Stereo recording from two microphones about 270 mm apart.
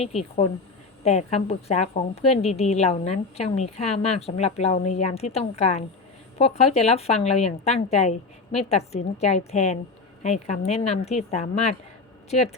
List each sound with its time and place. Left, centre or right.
1.0 s a woman's voice: left